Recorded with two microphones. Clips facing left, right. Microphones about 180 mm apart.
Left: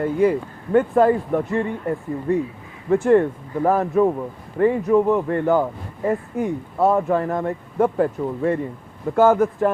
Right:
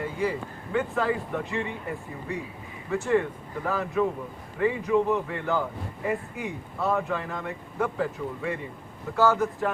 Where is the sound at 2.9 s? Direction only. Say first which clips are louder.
Left 9 dB; 50° left (ahead or behind).